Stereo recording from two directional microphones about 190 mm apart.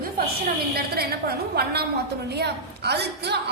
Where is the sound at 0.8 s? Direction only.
55° right (ahead or behind).